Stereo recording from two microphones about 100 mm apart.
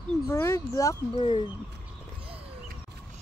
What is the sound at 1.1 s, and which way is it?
Speech, 65° left (ahead or behind).